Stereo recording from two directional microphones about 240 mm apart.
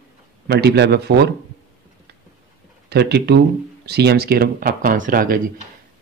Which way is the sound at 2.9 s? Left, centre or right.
Right.